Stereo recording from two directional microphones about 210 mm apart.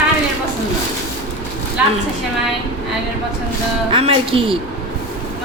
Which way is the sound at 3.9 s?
25° right (ahead or behind).